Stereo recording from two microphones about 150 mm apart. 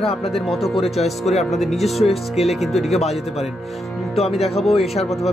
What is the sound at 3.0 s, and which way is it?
Speech, 45° left (ahead or behind).